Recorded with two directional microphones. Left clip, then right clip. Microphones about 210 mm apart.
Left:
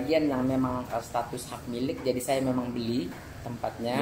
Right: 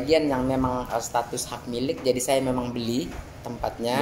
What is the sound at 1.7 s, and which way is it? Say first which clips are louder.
A woman's voice: right 5 dB; 55° right (ahead or behind).